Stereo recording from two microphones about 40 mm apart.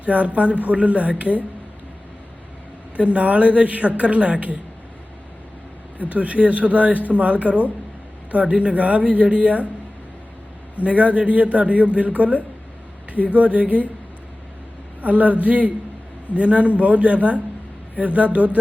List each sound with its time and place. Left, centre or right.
0.0 s speech: right
2.9 s speech: right
6.0 s speech: right
10.8 s speech: right
15.0 s speech: right